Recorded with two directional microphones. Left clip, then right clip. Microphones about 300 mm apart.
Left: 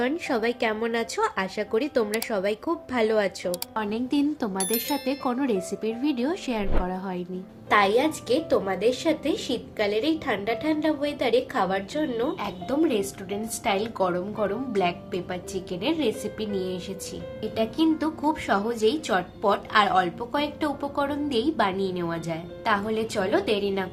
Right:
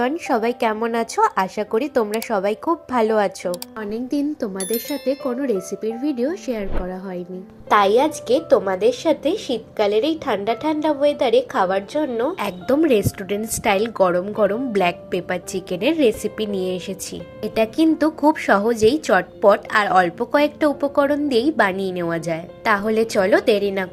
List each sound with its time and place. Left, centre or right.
0.0 s speech: centre
4.5 s a woman's voice: centre
5.3 s a woman's voice: centre
12.4 s a woman's voice: right